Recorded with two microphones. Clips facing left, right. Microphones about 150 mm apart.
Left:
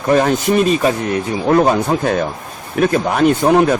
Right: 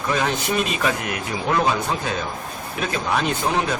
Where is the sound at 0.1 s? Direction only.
45° left (ahead or behind).